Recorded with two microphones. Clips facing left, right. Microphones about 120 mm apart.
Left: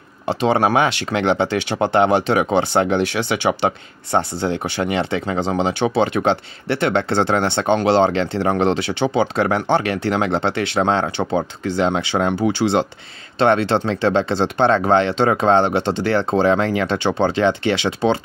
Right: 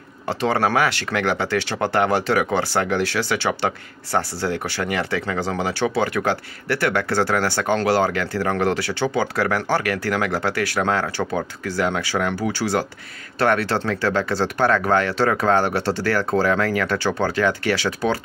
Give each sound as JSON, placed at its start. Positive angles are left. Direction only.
{"t": 0.3, "sound": "speech", "side_deg": 20}